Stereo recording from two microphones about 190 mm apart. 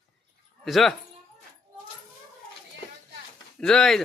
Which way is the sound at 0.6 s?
Centre (ahead or behind).